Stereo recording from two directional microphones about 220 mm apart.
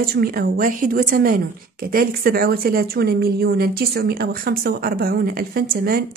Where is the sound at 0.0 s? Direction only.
45° right (ahead or behind).